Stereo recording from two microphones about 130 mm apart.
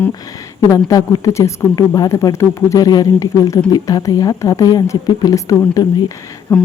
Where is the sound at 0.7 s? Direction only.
25° left (ahead or behind).